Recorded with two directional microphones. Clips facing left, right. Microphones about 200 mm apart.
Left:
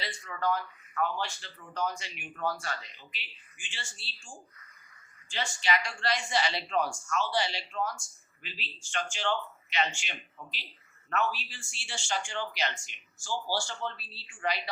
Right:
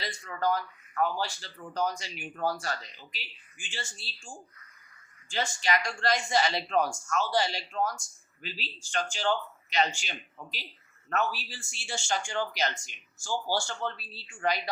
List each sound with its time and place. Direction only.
0.0 s speech: 40° right (ahead or behind)
5.3 s speech: 40° right (ahead or behind)